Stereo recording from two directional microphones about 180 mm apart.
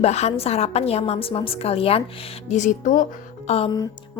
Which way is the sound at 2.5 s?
45° left (ahead or behind).